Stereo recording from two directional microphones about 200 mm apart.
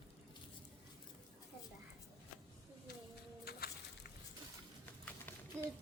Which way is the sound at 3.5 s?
50° left (ahead or behind).